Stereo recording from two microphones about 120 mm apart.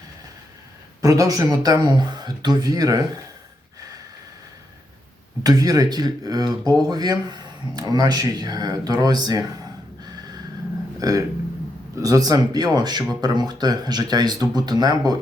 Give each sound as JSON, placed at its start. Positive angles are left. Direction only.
{"t": 1.0, "sound": "speech", "side_deg": -30}
{"t": 3.8, "sound": "a sound", "side_deg": -30}
{"t": 5.4, "sound": "speech", "side_deg": -30}
{"t": 10.0, "sound": "gasp", "side_deg": -35}
{"t": 11.0, "sound": "speech", "side_deg": -30}